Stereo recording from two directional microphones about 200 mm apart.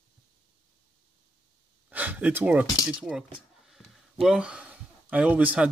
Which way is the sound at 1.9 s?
10° right (ahead or behind).